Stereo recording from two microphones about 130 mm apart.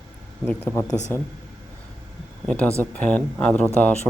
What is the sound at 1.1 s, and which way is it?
Speech, 15° left (ahead or behind).